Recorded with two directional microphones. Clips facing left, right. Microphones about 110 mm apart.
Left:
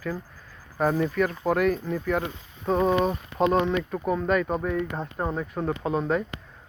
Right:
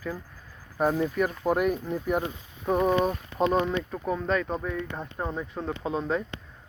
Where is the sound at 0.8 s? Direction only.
5° right (ahead or behind).